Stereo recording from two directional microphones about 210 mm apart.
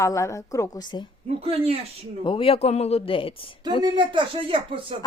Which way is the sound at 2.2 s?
25° left (ahead or behind).